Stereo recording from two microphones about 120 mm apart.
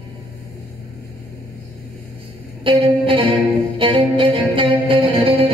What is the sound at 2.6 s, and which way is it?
Music, 45° right (ahead or behind).